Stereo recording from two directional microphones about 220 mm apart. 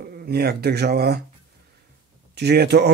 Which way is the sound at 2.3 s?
50° right (ahead or behind).